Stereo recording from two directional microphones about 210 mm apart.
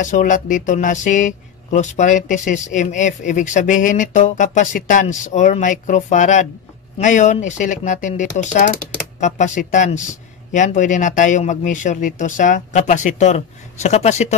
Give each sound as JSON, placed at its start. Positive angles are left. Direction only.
{"t": 0.0, "sound": "speech", "side_deg": 40}